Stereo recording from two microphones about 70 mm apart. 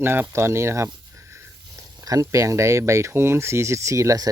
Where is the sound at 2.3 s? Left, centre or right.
Right.